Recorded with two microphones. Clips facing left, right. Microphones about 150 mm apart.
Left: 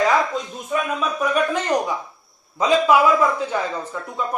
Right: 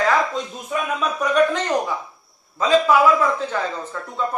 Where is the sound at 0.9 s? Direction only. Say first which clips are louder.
Right 5 dB; 5° left (ahead or behind).